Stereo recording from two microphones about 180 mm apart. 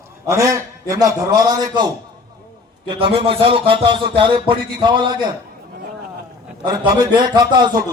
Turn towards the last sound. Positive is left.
turn(degrees=-25)  # may be behind; listen again after turning